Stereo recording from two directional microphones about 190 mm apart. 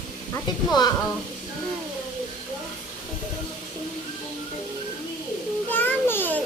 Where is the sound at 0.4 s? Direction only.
20° left (ahead or behind).